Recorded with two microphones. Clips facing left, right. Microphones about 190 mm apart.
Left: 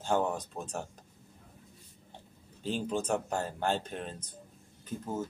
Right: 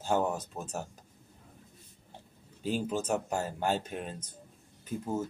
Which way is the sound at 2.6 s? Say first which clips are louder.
Right 1 dB; 5° right (ahead or behind).